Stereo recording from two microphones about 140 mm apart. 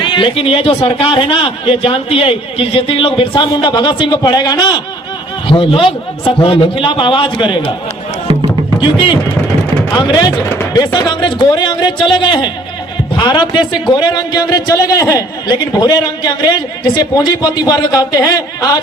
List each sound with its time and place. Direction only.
0.0 s a man's voice: 35° left (ahead or behind)
5.5 s a man's voice: 40° left (ahead or behind)
9.9 s a man's voice: 35° left (ahead or behind)